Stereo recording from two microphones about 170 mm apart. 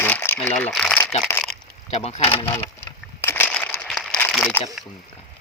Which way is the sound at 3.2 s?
10° left (ahead or behind).